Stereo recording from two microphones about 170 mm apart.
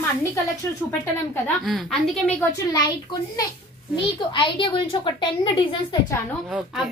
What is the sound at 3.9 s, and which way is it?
A woman's voice, 30° left (ahead or behind).